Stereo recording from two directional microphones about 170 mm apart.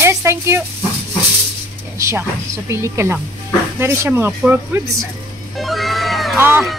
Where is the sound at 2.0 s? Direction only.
15° right (ahead or behind).